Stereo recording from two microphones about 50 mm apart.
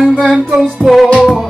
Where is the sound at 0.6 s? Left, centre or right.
Centre.